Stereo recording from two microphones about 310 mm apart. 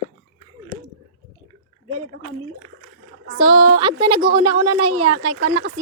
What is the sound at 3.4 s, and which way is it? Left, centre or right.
A woman's voice, centre.